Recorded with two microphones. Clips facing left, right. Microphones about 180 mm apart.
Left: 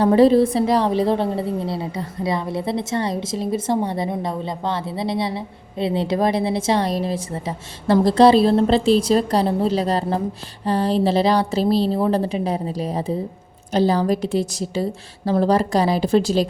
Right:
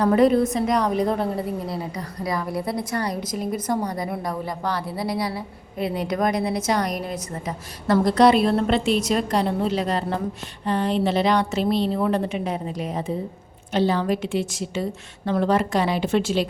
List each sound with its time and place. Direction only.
0.0 s a woman's voice: 30° left (ahead or behind)